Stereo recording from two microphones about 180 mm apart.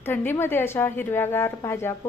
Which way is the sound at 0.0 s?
10° left (ahead or behind).